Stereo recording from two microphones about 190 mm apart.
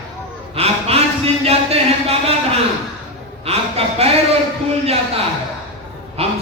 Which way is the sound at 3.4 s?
30° right (ahead or behind).